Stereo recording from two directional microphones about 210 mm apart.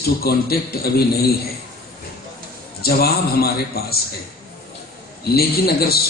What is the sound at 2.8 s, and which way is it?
A man's voice, 45° left (ahead or behind).